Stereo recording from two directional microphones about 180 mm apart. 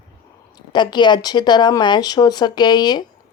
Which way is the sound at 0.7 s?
25° left (ahead or behind).